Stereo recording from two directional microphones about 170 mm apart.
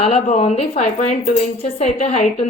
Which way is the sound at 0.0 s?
40° left (ahead or behind).